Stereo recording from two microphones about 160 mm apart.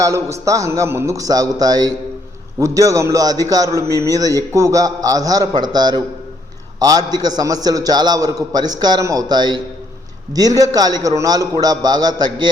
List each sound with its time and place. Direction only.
0.0 s a man's voice: 20° right (ahead or behind)